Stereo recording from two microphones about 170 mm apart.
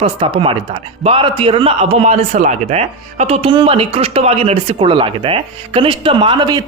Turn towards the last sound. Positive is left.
turn(degrees=-25)  # may be behind; listen again after turning